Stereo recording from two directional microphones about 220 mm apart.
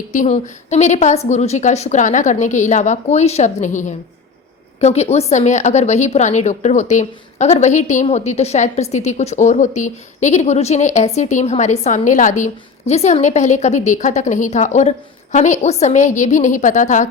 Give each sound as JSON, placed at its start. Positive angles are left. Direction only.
{"t": 0.1, "sound": "a woman's voice", "side_deg": 35}